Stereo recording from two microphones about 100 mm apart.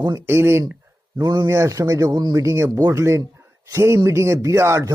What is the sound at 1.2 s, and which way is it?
Speech, 35° right (ahead or behind).